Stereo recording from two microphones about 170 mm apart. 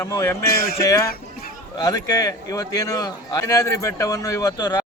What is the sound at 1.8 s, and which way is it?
A man's voice, 20° left (ahead or behind).